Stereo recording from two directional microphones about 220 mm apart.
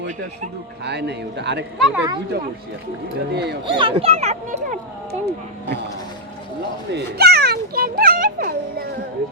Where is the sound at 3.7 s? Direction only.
25° right (ahead or behind).